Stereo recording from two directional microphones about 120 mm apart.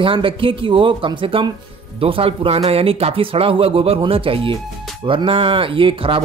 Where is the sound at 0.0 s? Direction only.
45° right (ahead or behind).